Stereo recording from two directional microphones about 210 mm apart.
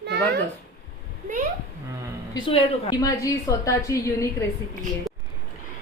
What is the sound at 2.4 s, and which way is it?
A woman's voice, 20° left (ahead or behind).